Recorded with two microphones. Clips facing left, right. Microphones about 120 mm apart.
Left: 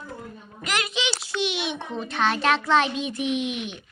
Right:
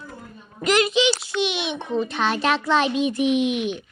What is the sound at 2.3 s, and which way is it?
Speech, 15° right (ahead or behind).